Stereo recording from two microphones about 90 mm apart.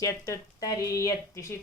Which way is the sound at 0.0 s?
40° left (ahead or behind).